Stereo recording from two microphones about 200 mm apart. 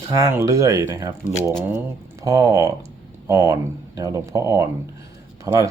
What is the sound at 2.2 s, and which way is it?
Speech, 15° right (ahead or behind).